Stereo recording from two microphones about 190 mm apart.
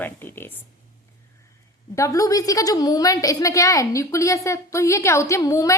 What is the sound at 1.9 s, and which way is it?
A woman's voice, 15° left (ahead or behind).